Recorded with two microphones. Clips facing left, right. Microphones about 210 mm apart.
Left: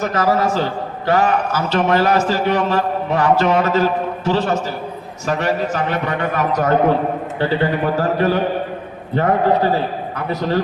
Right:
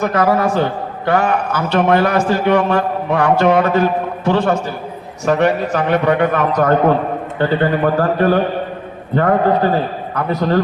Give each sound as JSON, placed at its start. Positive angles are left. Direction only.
{"t": 0.0, "sound": "a man's voice", "side_deg": -55}